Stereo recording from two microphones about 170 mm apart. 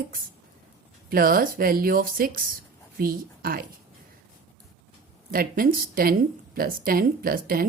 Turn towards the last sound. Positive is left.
turn(degrees=-60)  # may be behind; listen again after turning